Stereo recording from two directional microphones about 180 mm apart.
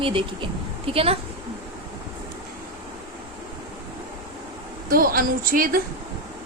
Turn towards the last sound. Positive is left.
turn(degrees=-50)  # may be behind; listen again after turning